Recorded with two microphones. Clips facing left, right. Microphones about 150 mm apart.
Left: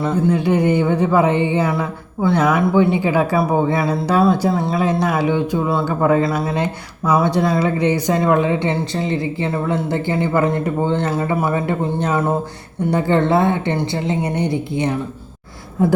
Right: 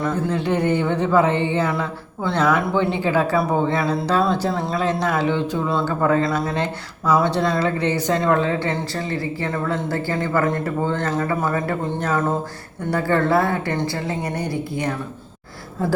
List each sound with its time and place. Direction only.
0.1 s speech: 10° left (ahead or behind)